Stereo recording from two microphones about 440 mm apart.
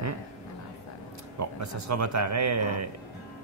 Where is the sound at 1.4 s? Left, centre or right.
Right.